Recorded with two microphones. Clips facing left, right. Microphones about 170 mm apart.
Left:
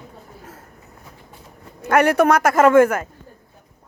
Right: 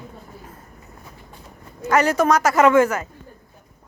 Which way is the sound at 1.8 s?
60° left (ahead or behind).